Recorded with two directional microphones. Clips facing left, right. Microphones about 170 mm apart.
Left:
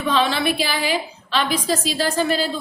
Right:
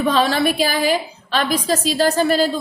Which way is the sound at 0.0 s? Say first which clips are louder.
Right 3 dB; 45° right (ahead or behind).